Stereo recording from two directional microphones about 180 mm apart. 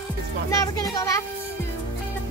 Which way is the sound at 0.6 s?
20° left (ahead or behind).